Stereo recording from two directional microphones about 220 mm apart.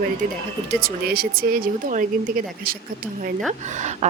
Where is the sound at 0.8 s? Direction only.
45° right (ahead or behind).